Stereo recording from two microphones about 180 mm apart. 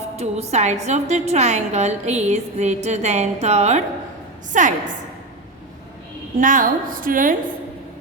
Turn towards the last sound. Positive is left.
turn(degrees=-50)  # may be behind; listen again after turning